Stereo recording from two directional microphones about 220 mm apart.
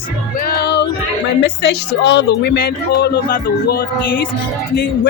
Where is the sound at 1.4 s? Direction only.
50° left (ahead or behind).